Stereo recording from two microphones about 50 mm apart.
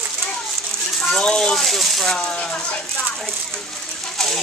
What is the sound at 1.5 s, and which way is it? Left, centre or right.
Speech, centre.